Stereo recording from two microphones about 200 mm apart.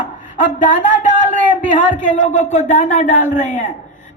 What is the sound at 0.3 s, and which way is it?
Speech, 40° left (ahead or behind).